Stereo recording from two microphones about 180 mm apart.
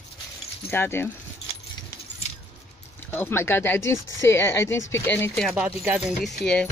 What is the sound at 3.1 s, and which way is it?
Speech, 10° left (ahead or behind).